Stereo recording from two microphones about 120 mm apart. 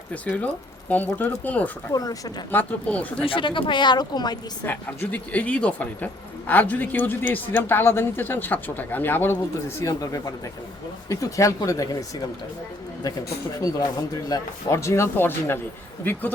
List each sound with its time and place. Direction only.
0.1 s speech: 10° left (ahead or behind)
1.9 s speech: 30° left (ahead or behind)
2.5 s speech: 15° left (ahead or behind)
3.2 s speech: 45° left (ahead or behind)
4.6 s speech: 15° left (ahead or behind)
13.6 s speech: 30° left (ahead or behind)